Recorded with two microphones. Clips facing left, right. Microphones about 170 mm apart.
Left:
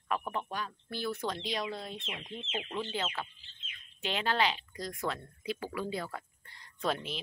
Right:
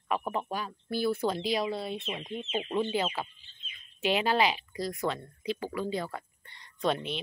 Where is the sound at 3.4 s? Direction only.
90° left.